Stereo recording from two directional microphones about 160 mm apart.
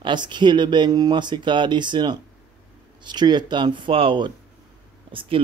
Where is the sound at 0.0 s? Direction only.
30° right (ahead or behind).